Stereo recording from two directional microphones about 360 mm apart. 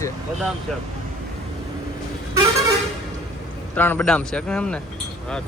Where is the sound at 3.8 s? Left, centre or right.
Centre.